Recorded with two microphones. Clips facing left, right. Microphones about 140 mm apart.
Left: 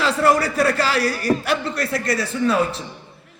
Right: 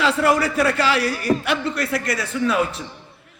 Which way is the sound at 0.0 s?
40° left (ahead or behind).